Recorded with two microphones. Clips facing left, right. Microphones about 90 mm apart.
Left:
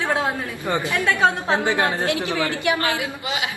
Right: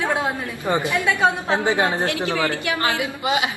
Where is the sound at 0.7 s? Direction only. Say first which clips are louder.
Right 1 dB; 20° right (ahead or behind).